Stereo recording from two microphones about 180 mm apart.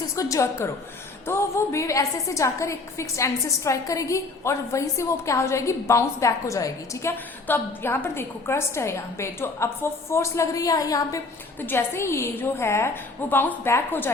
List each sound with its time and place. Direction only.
0.2 s a woman's voice: 15° left (ahead or behind)